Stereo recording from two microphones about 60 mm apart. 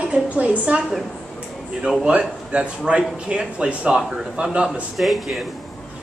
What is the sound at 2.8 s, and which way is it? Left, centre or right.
A woman's voice, centre.